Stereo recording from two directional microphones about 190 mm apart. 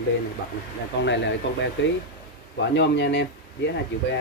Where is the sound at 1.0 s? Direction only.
70° left (ahead or behind).